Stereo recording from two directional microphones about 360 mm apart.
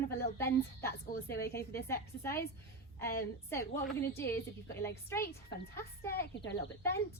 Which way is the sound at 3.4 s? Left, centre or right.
Centre.